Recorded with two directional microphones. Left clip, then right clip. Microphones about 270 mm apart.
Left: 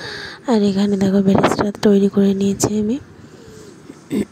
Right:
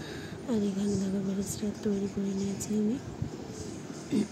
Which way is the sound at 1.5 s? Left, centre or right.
Left.